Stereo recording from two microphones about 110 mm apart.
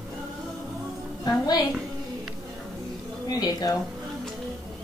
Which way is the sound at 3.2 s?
35° left (ahead or behind).